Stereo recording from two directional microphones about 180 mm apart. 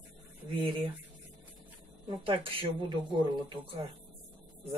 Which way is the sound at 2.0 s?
30° right (ahead or behind).